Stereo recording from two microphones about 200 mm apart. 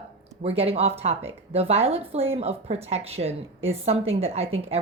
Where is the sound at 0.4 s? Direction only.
30° right (ahead or behind).